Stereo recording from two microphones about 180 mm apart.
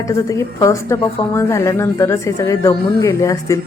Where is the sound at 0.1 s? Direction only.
20° left (ahead or behind).